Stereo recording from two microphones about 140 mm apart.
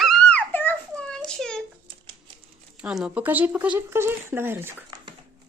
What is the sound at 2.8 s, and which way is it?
Speech, 5° right (ahead or behind).